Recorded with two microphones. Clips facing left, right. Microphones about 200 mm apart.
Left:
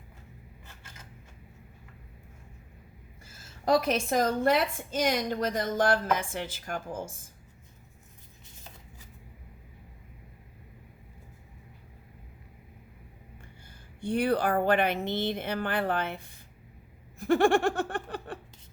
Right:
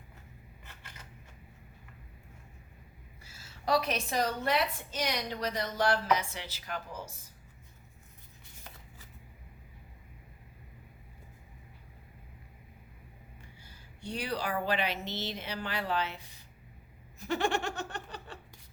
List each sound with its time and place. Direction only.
3.2 s a woman's voice: 50° left (ahead or behind)
13.7 s a woman's voice: 50° left (ahead or behind)